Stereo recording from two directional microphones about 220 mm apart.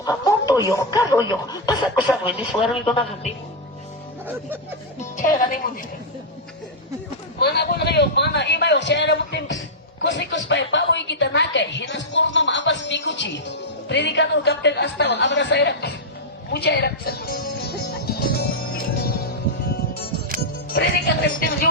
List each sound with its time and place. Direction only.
0.0 s snicker: 15° left (ahead or behind)
0.9 s speech: 15° left (ahead or behind)
2.0 s speech: 5° right (ahead or behind)
2.8 s speech: 25° left (ahead or behind)
5.1 s a woman's voice: 35° left (ahead or behind)
7.3 s a man's voice: 45° left (ahead or behind)
16.5 s music: 45° left (ahead or behind)
20.7 s a man's voice: 45° left (ahead or behind)